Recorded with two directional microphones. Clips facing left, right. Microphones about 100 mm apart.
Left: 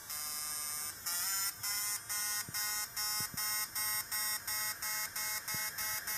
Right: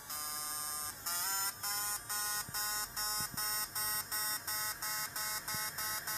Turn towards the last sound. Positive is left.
turn(degrees=-40)  # may be behind; listen again after turning